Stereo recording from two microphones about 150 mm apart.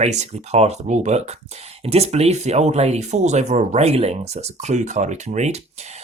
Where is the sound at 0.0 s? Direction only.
50° right (ahead or behind).